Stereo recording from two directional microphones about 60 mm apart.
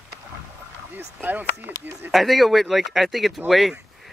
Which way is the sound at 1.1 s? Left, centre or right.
Right.